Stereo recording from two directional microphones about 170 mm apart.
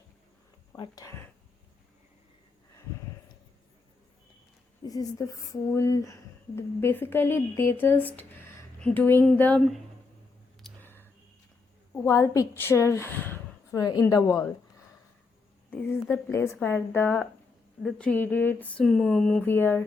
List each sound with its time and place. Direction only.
0.8 s speech: 20° left (ahead or behind)
4.9 s speech: 20° left (ahead or behind); by 9.8 s centre (ahead or behind)
10.6 s a sound: 10° left (ahead or behind)
12.0 s a woman's voice: 20° left (ahead or behind)
15.7 s speech: 10° left (ahead or behind)